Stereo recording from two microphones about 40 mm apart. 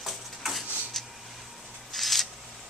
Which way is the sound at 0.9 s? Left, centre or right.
Centre.